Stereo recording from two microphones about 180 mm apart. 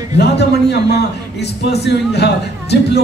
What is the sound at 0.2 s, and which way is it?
A man's voice, 70° left (ahead or behind).